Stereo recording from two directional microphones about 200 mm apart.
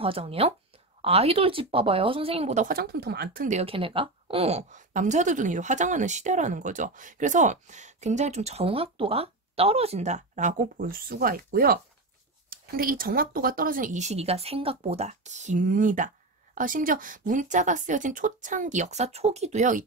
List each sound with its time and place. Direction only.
0.0 s speech: 30° right (ahead or behind); by 3.4 s 55° right (ahead or behind)
3.4 s a woman's voice: 30° right (ahead or behind)